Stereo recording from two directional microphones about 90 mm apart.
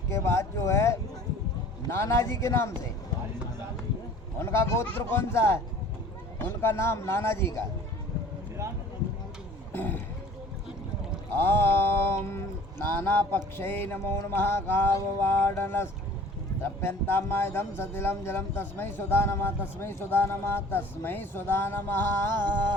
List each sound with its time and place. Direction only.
0.1 s a man's voice: 30° left (ahead or behind)
4.4 s speech: 30° left (ahead or behind)
9.7 s speech: 20° left (ahead or behind)
11.3 s a sound: 25° left (ahead or behind)
13.1 s speech: 20° left (ahead or behind)